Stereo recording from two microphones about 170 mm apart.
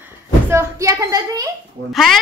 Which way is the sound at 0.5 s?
20° right (ahead or behind).